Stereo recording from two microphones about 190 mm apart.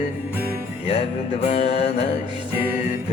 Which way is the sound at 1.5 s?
35° left (ahead or behind).